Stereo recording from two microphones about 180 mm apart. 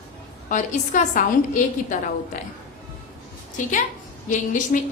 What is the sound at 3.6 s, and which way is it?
A woman's voice, 45° left (ahead or behind).